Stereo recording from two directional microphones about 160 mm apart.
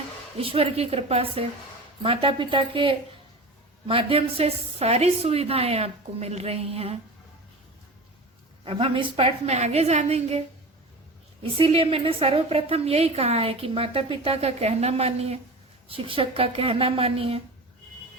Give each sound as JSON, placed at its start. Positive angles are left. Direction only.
{"t": 0.3, "sound": "a woman's voice", "side_deg": -35}
{"t": 8.6, "sound": "a woman's voice", "side_deg": -35}
{"t": 11.5, "sound": "a woman's voice", "side_deg": -35}